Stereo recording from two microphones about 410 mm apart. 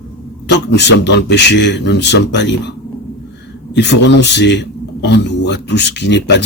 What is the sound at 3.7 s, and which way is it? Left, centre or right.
A man's voice, left.